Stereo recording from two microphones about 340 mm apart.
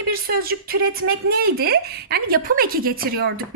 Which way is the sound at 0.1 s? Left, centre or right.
Right.